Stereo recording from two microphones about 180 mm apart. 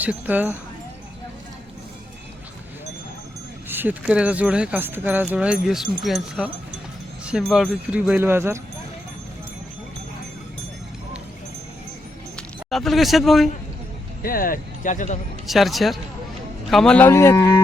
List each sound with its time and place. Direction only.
0.0 s speech: 10° right (ahead or behind)
3.7 s speech: 10° right (ahead or behind)
12.4 s speech: centre (ahead or behind)
14.2 s speech: 50° left (ahead or behind)
15.4 s a man's voice: centre (ahead or behind)